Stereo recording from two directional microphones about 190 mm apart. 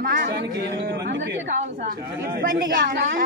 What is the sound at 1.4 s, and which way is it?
Speech, 40° right (ahead or behind).